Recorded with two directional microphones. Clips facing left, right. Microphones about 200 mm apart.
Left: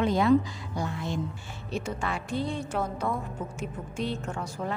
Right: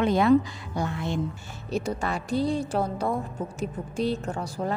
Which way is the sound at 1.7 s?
40° right (ahead or behind).